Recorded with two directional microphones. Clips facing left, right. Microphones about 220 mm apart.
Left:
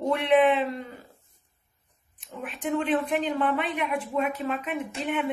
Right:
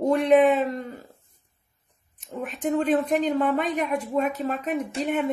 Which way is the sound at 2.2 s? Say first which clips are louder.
Right 5 dB; 40° right (ahead or behind).